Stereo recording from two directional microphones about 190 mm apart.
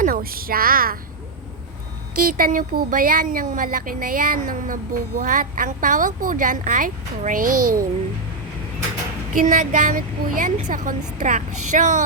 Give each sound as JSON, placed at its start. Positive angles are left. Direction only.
{"t": 0.0, "sound": "a woman's voice", "side_deg": -50}
{"t": 2.1, "sound": "speech", "side_deg": -45}
{"t": 9.4, "sound": "speech", "side_deg": -45}